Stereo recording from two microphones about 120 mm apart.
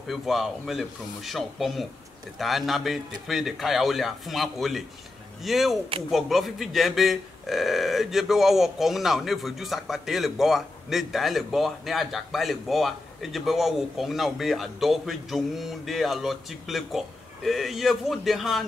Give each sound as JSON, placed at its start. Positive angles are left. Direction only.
{"t": 0.0, "sound": "speech", "side_deg": 0}